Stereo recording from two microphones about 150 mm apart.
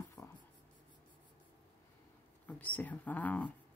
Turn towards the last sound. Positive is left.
turn(degrees=10)  # may be behind; listen again after turning